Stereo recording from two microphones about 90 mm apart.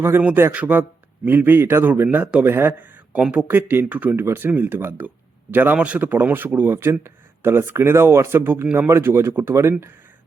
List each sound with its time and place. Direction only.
0.0 s speech: 25° right (ahead or behind)
8.6 s speech: 15° right (ahead or behind)
8.9 s speech: 30° right (ahead or behind)